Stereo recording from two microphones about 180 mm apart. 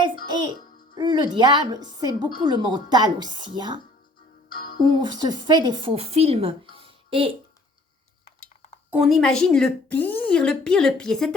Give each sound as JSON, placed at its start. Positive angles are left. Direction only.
{"t": 0.3, "sound": "music", "side_deg": -25}
{"t": 0.9, "sound": "a woman's voice", "side_deg": -25}
{"t": 4.5, "sound": "music", "side_deg": 55}
{"t": 4.9, "sound": "a woman's voice", "side_deg": -25}
{"t": 8.9, "sound": "a woman's voice", "side_deg": 0}